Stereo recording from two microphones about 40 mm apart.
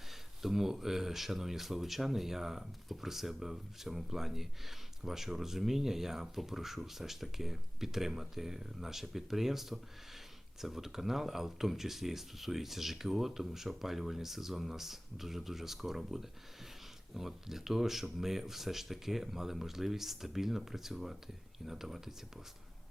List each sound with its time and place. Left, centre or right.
0.1 s speech: centre